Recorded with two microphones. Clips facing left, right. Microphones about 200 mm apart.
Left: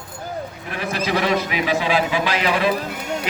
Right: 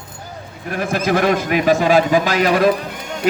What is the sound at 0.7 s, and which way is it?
A man's voice, 50° right (ahead or behind).